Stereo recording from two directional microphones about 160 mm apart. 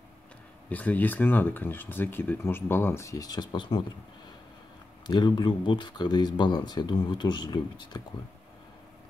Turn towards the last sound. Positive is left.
turn(degrees=25)  # may be behind; listen again after turning